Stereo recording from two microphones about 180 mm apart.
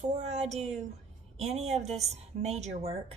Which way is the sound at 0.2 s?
40° right (ahead or behind).